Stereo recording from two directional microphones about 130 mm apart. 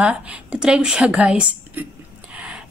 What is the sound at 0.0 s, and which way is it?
A woman's voice, 10° right (ahead or behind).